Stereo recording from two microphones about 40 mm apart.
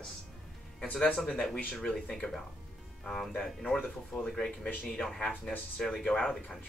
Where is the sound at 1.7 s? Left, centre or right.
Left.